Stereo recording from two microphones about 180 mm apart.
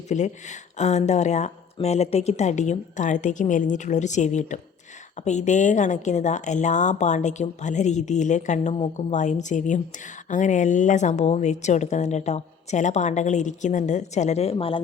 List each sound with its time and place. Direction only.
0.1 s speech: 40° left (ahead or behind)